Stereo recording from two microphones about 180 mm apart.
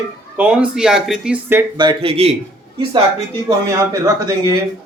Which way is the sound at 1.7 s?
25° right (ahead or behind).